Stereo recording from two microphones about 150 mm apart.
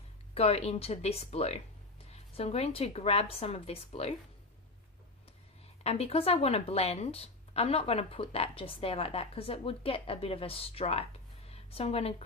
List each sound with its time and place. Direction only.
0.3 s a woman's voice: 45° left (ahead or behind)
5.8 s a woman's voice: 45° left (ahead or behind)
11.4 s a sound: 40° left (ahead or behind)